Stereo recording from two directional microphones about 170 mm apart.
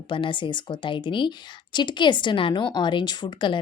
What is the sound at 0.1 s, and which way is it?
A woman's voice, 30° left (ahead or behind).